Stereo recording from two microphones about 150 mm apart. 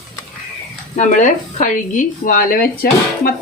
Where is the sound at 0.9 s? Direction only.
55° left (ahead or behind).